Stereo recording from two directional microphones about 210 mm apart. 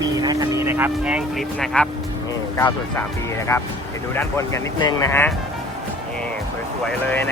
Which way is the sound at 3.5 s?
15° left (ahead or behind).